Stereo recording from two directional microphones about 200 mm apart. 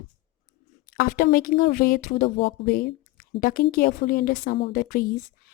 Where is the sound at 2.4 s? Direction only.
55° left (ahead or behind).